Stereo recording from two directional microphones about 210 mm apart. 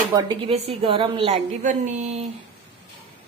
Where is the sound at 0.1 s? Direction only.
20° right (ahead or behind).